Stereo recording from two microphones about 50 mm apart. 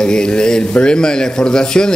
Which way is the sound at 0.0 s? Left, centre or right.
Centre.